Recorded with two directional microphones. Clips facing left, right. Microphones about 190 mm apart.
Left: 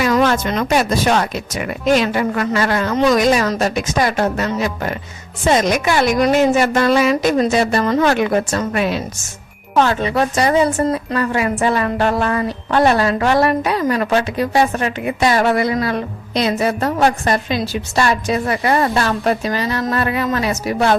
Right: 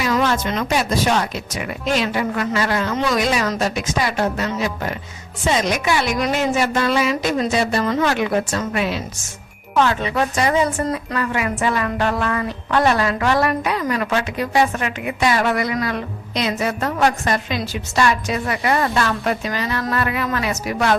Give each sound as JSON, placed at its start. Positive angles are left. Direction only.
{"t": 0.0, "sound": "a woman's voice", "side_deg": 50}